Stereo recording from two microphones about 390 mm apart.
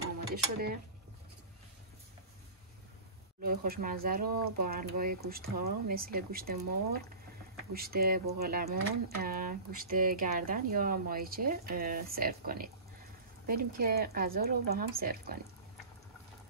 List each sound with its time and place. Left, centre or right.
0.0 s mechanisms: right
3.4 s speech: right